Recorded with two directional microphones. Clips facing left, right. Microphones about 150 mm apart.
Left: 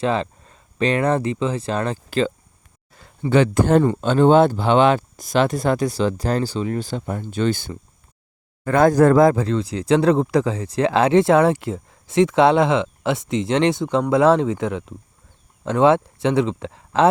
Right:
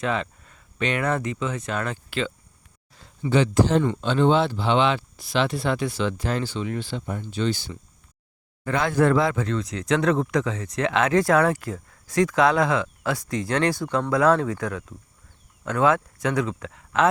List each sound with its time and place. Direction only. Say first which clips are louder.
0.0 s speech: left 5 dB; 30° left (ahead or behind)
2.9 s speech: left 4 dB; 55° left (ahead or behind)
3.8 s speech: left 5 dB; 40° left (ahead or behind)